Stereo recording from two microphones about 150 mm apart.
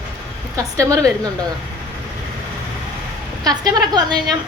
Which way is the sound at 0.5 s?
20° right (ahead or behind).